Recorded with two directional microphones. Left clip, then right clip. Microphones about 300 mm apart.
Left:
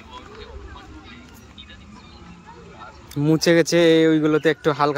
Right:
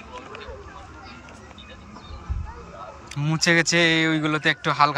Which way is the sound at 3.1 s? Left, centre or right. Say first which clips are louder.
Left 3 dB; centre.